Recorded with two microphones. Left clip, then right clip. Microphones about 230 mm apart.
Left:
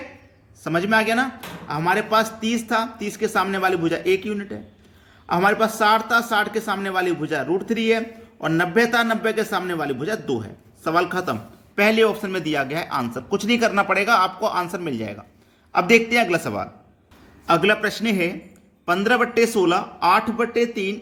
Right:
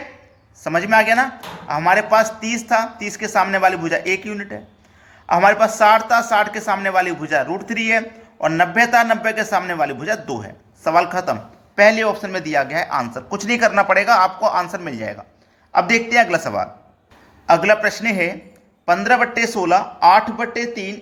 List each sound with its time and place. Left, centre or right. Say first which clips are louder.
0.6 s a woman's voice: right 5 dB; centre